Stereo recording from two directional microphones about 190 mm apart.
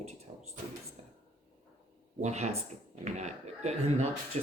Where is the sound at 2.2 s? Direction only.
35° right (ahead or behind).